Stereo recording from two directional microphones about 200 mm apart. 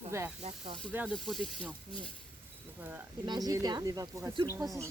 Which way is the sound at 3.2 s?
20° right (ahead or behind).